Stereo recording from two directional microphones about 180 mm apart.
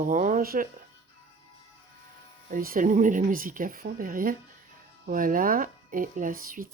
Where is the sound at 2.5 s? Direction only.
50° right (ahead or behind).